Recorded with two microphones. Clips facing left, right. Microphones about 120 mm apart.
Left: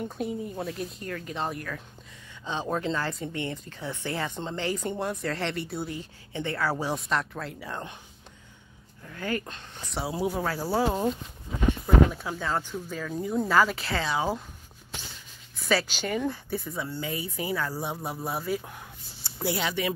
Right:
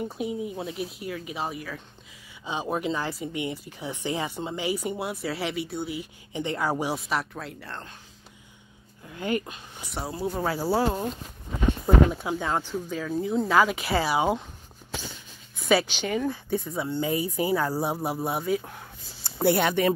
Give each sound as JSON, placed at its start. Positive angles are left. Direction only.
{"t": 0.0, "sound": "speech", "side_deg": -5}
{"t": 5.9, "sound": "speech", "side_deg": -15}
{"t": 7.6, "sound": "speech", "side_deg": 10}
{"t": 9.0, "sound": "speech", "side_deg": -20}
{"t": 9.5, "sound": "speech", "side_deg": -10}
{"t": 10.8, "sound": "speech", "side_deg": 5}
{"t": 12.1, "sound": "speech", "side_deg": -20}
{"t": 15.8, "sound": "speech", "side_deg": -10}
{"t": 16.6, "sound": "speech", "side_deg": -25}
{"t": 18.4, "sound": "speech", "side_deg": 0}
{"t": 19.2, "sound": "speech", "side_deg": -55}